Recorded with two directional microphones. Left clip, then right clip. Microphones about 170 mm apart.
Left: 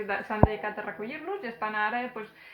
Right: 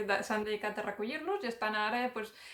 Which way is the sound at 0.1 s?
30° right (ahead or behind).